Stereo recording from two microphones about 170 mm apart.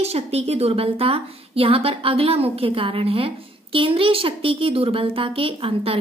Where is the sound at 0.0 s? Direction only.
35° right (ahead or behind).